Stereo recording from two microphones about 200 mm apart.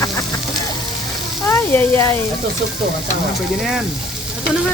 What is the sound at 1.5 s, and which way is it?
Speech, 10° left (ahead or behind).